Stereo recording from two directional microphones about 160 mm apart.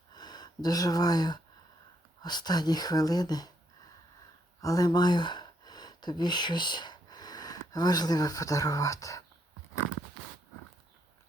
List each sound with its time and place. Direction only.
0.1 s speech: 25° left (ahead or behind)
4.6 s speech: 20° left (ahead or behind)